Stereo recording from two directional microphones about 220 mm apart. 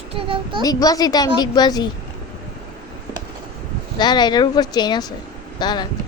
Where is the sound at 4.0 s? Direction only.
20° left (ahead or behind).